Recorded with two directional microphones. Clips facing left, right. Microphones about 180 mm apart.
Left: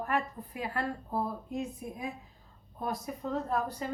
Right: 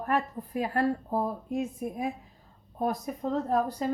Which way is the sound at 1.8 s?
55° right (ahead or behind).